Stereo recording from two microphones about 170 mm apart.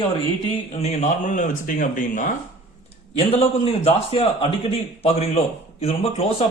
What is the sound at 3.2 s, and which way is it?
A man's voice, 35° left (ahead or behind).